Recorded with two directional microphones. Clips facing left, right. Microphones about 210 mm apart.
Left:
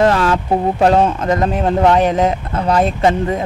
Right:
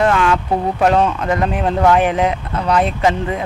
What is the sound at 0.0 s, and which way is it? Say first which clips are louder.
Speech: left 1 dB; 35° left (ahead or behind).